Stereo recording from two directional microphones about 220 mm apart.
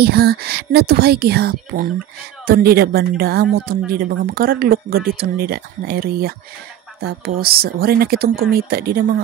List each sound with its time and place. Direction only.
0.0 s speech: 45° right (ahead or behind)